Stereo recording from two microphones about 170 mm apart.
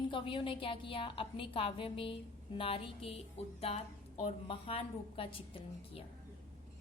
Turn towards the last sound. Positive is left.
turn(degrees=30)  # may be behind; listen again after turning